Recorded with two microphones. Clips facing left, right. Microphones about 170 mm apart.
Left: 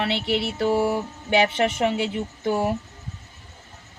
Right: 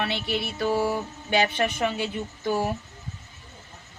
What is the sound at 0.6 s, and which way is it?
Speech, 25° left (ahead or behind).